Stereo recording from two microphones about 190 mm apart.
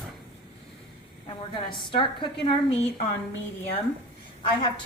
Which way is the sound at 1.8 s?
25° left (ahead or behind).